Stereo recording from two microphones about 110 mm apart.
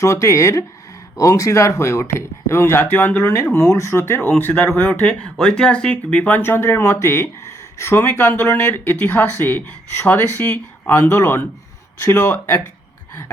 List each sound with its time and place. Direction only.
0.0 s speech: 30° left (ahead or behind)